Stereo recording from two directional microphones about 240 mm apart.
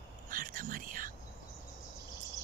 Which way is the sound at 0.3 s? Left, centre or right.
Right.